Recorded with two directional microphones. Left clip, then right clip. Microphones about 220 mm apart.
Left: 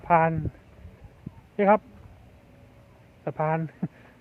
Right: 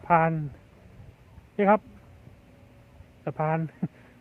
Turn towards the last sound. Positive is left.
turn(degrees=-5)  # may be behind; listen again after turning